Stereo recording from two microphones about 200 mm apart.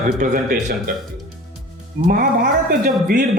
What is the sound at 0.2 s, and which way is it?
Speech, 40° right (ahead or behind).